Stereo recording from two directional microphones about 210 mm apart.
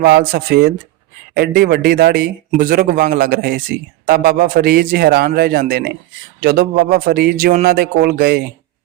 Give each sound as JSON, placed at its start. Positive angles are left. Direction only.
{"t": 0.0, "sound": "a man's voice", "side_deg": -45}